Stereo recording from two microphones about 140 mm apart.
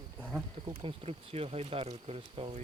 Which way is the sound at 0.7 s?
40° right (ahead or behind).